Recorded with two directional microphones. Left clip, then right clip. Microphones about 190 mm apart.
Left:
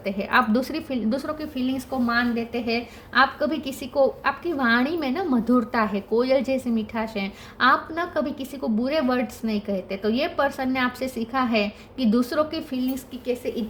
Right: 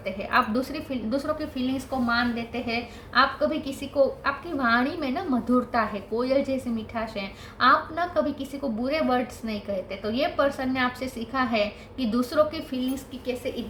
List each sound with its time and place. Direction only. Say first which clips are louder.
0.0 s a woman's voice: left 3 dB; 55° left (ahead or behind)